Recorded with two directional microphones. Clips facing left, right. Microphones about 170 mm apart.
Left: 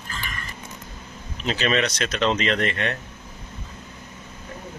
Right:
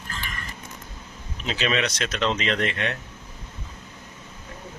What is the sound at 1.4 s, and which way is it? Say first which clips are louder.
A man's voice: left 2 dB; centre (ahead or behind).